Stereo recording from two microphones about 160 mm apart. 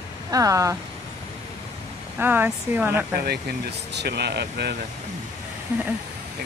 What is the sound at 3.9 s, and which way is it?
Speech, 90° right.